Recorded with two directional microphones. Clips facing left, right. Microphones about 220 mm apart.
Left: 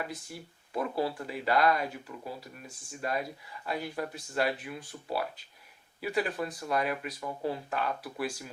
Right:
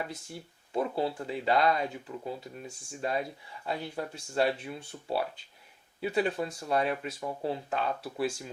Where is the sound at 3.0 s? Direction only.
25° right (ahead or behind).